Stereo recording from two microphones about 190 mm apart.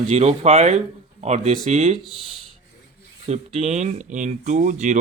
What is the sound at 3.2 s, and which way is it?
Speech, 35° right (ahead or behind).